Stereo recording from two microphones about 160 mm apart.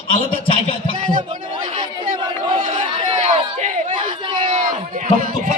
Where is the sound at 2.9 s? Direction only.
40° right (ahead or behind).